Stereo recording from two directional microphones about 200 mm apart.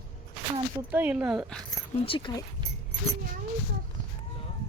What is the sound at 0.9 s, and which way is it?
Speech, 10° right (ahead or behind).